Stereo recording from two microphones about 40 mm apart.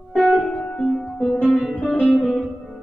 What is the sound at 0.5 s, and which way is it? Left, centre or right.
Music, left.